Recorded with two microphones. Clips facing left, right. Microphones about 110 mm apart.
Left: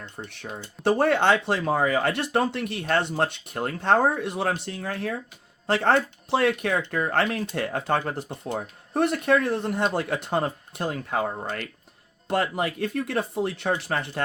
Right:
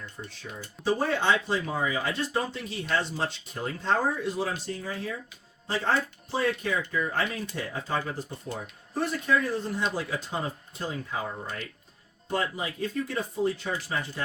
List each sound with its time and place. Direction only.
0.2 s speech: 65° left (ahead or behind)